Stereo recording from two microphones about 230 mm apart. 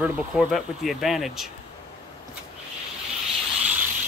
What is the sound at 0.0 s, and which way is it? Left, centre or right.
Speech, centre.